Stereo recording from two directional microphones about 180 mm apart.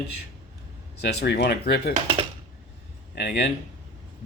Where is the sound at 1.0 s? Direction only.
65° left (ahead or behind).